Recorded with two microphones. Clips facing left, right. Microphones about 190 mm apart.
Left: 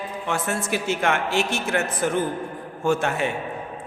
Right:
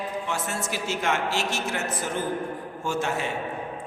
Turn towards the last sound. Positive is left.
turn(degrees=55)  # may be behind; listen again after turning